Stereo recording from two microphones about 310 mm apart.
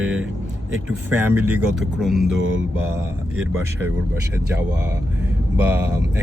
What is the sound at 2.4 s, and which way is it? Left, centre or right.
Mantra, right.